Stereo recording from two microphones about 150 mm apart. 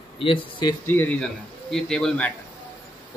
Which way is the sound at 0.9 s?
15° left (ahead or behind).